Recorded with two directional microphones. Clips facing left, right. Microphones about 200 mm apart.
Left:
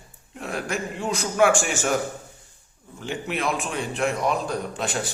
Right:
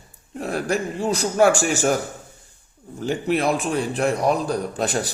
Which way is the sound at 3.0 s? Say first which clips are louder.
Right 6 dB; 40° right (ahead or behind).